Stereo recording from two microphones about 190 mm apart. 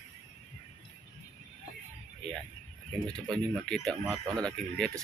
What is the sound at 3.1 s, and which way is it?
Speech, 5° left (ahead or behind).